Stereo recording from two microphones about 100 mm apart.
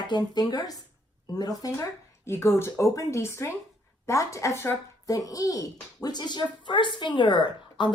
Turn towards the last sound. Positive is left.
turn(degrees=50)  # may be behind; listen again after turning